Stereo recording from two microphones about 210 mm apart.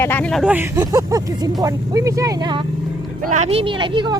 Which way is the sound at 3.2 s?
35° right (ahead or behind).